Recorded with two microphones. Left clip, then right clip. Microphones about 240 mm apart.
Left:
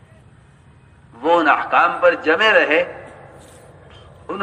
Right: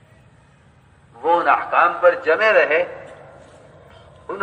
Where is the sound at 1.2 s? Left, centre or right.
Left.